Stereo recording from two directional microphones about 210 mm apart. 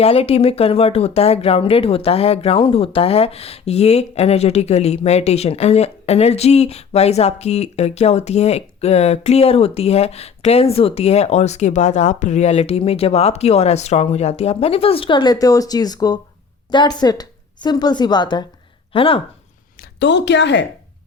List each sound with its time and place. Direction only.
0.0 s speech: 30° left (ahead or behind)
20.0 s a woman's voice: 55° left (ahead or behind)